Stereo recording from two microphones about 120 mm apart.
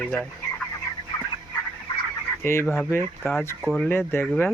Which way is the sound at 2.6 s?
5° left (ahead or behind).